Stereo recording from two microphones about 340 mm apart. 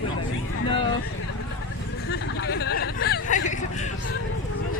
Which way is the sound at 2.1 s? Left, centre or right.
Left.